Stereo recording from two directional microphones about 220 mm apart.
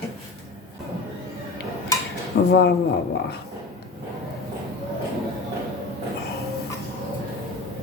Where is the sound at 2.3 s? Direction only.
45° left (ahead or behind).